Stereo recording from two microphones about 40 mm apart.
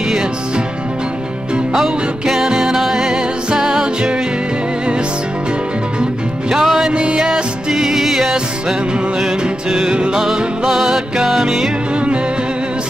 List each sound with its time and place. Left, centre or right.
1.7 s music: centre
6.5 s music: centre
6.9 s music: right
7.7 s music: centre
9.9 s music: right
10.2 s music: centre